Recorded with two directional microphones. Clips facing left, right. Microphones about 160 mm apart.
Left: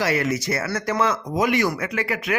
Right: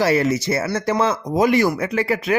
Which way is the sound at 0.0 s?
30° right (ahead or behind).